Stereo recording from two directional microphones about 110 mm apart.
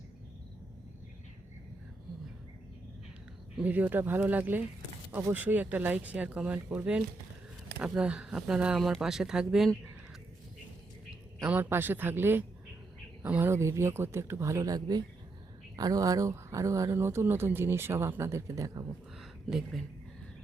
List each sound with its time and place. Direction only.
3.6 s speech: 15° right (ahead or behind)
11.4 s speech: 15° right (ahead or behind); by 18.9 s 30° right (ahead or behind)
19.2 s a sound: 5° right (ahead or behind)